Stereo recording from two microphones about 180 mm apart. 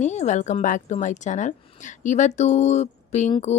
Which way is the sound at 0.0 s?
40° left (ahead or behind).